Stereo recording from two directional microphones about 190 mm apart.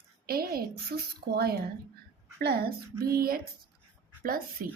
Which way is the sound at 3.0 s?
50° right (ahead or behind).